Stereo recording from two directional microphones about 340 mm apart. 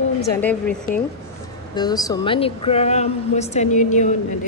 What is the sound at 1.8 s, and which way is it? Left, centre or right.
Speech, centre.